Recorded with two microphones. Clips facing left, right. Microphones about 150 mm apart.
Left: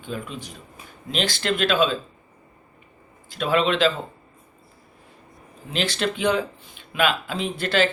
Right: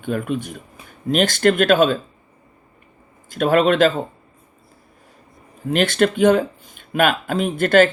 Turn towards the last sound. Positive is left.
turn(degrees=-50)  # may be behind; listen again after turning